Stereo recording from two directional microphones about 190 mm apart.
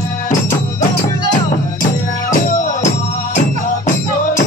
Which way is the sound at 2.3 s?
40° left (ahead or behind).